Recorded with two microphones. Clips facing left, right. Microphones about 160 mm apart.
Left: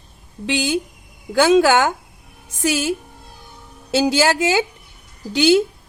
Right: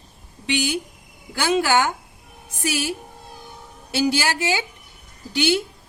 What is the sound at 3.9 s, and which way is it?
Speech, 90° left.